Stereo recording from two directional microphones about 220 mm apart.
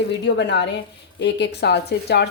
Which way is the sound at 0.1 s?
50° left (ahead or behind).